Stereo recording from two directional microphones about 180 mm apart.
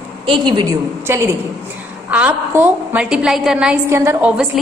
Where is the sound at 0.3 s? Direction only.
25° right (ahead or behind).